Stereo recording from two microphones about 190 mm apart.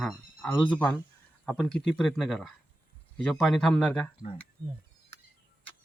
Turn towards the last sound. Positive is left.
turn(degrees=5)  # may be behind; listen again after turning